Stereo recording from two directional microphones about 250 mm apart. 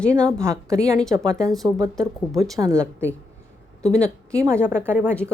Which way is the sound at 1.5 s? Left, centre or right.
Centre.